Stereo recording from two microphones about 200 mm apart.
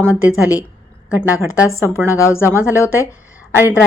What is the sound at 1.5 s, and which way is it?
Speech, 15° left (ahead or behind).